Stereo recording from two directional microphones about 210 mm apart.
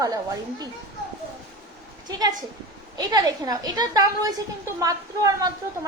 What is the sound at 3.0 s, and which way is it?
A woman's voice, 20° right (ahead or behind).